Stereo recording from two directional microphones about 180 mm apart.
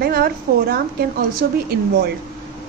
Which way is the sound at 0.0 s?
60° right (ahead or behind).